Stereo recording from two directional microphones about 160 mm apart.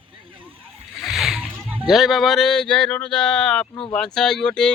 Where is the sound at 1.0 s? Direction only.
Centre (ahead or behind).